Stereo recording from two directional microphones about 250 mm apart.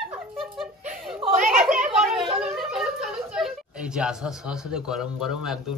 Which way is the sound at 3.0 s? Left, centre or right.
Centre.